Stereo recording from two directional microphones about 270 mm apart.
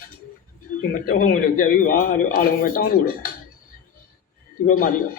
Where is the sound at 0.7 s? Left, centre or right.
Left.